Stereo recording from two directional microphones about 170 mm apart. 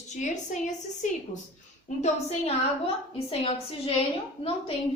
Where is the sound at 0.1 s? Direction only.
45° left (ahead or behind).